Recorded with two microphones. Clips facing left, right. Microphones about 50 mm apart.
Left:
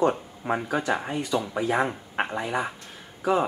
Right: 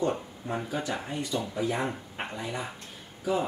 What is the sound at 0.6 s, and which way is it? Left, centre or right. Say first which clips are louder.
Speech: left 7 dB; left.